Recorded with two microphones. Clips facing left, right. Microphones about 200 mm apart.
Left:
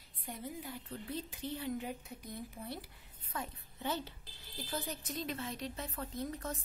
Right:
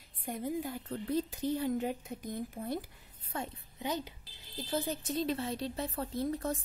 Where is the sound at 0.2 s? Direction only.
50° right (ahead or behind).